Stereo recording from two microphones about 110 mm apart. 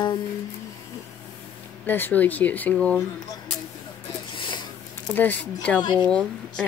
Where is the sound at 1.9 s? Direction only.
15° left (ahead or behind).